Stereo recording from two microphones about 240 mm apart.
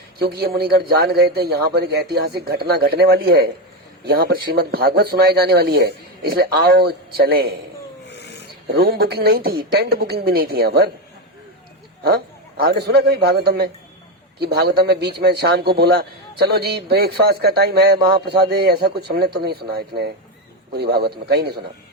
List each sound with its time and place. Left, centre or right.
0.2 s a man's voice: right
8.0 s filing: left
8.7 s a man's voice: right
12.0 s a man's voice: right